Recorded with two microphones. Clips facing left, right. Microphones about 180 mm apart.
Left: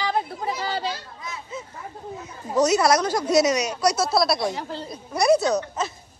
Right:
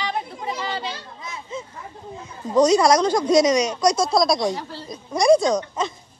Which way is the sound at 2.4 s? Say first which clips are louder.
Right 3 dB; 10° left (ahead or behind).